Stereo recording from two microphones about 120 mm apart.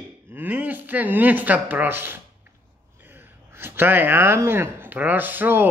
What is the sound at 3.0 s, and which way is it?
Speech, 15° right (ahead or behind).